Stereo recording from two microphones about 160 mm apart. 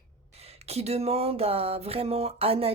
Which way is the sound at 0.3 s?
40° right (ahead or behind).